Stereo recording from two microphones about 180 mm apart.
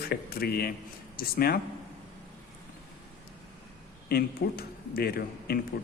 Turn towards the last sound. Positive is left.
turn(degrees=60)  # may be behind; listen again after turning